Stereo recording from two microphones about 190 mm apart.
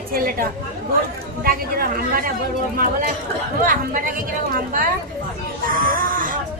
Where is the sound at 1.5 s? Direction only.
50° right (ahead or behind).